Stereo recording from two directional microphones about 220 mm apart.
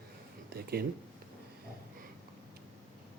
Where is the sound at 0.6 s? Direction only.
45° right (ahead or behind).